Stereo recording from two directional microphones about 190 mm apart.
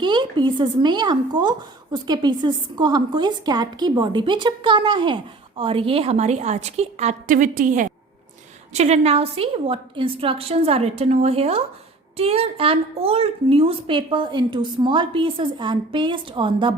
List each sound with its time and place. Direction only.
0.0 s a woman's voice: 25° right (ahead or behind)